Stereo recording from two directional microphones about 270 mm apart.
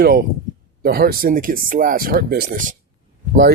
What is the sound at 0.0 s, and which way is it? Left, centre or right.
Speech, right.